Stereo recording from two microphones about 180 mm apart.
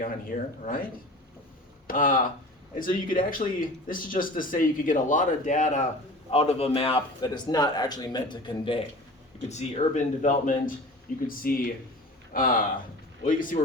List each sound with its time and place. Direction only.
0.0 s speech: 50° left (ahead or behind)
1.9 s a man's voice: 50° left (ahead or behind); by 8.8 s 25° left (ahead or behind)
9.5 s speech: 40° left (ahead or behind)